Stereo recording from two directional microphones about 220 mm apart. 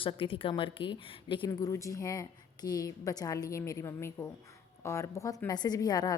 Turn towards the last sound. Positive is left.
turn(degrees=15)  # may be behind; listen again after turning